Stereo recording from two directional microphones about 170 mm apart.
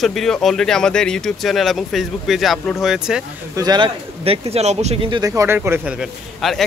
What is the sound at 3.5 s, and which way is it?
Speech, 25° right (ahead or behind).